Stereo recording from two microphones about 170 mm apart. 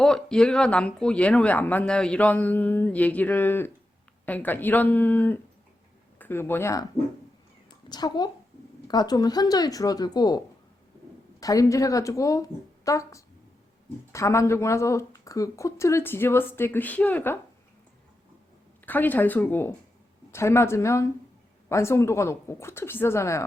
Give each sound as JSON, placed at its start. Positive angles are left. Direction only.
{"t": 0.0, "sound": "speech", "side_deg": 5}
{"t": 7.9, "sound": "a woman's voice", "side_deg": 25}
{"t": 18.9, "sound": "speech", "side_deg": 10}